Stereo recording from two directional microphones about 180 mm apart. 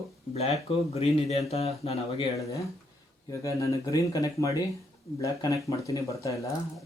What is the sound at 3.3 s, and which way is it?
Speech, 15° left (ahead or behind).